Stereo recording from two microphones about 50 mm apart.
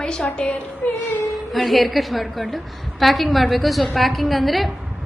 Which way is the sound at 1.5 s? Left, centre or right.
Centre.